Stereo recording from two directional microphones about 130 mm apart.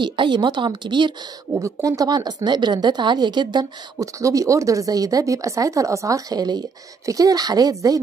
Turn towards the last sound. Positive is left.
turn(degrees=-30)  # may be behind; listen again after turning